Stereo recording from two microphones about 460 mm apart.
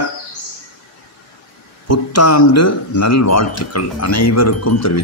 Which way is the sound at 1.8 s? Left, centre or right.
Left.